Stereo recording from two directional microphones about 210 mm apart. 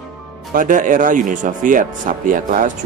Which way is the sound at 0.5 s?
40° right (ahead or behind).